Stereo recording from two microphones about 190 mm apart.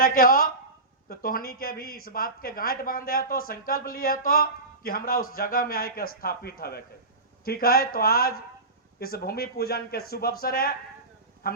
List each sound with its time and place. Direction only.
0.0 s a man's voice: 50° left (ahead or behind)